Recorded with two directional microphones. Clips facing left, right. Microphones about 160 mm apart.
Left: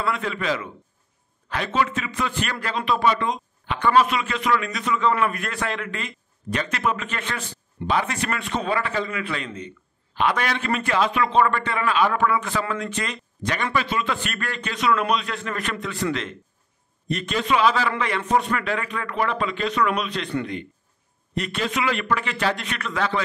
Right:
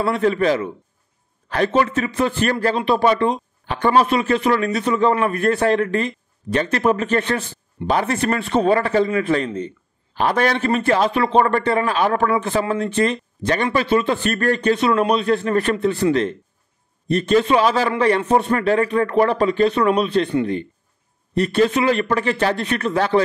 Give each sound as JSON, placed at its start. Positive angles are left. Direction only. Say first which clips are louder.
{"t": 0.0, "sound": "speech", "louder": "right 8 dB", "side_deg": -40}
{"t": 21.4, "sound": "speech", "louder": "right 9 dB", "side_deg": -35}